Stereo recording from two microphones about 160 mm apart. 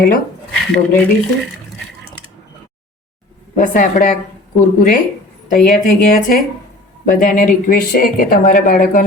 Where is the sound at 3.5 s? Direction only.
55° left (ahead or behind).